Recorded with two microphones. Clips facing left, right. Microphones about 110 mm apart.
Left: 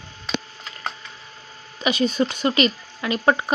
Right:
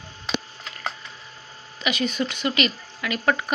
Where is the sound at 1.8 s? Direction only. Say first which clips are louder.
Left 4 dB; 35° left (ahead or behind).